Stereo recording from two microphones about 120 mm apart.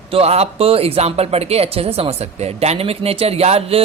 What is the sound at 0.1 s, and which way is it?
Speech, 60° right (ahead or behind).